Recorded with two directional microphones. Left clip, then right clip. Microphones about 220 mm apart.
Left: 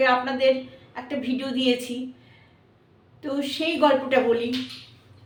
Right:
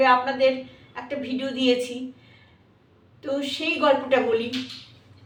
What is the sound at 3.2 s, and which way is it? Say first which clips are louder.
Speech: even; 10° left (ahead or behind).